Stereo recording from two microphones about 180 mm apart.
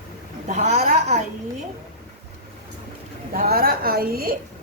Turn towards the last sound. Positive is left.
turn(degrees=-55)  # may be behind; listen again after turning